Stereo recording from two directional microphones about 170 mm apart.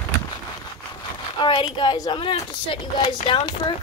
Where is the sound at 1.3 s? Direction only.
30° left (ahead or behind).